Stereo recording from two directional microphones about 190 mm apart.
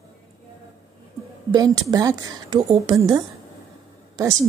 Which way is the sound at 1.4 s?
20° right (ahead or behind).